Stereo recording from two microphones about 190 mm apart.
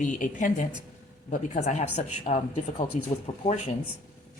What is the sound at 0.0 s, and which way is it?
Speech, 40° left (ahead or behind).